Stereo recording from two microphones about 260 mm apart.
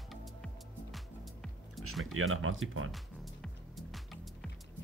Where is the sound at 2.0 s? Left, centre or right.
Right.